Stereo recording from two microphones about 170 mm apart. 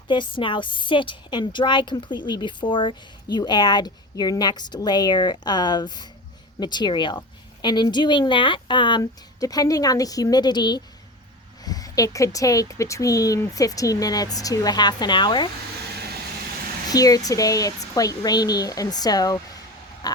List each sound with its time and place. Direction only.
0.1 s a woman's voice: 30° left (ahead or behind)
16.9 s a woman's voice: 20° left (ahead or behind)
20.0 s pig: 25° left (ahead or behind)